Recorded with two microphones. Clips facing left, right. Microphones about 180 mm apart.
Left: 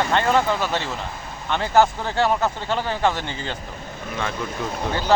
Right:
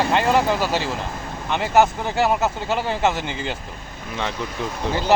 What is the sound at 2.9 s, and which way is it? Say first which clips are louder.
Speech: even; 25° right (ahead or behind).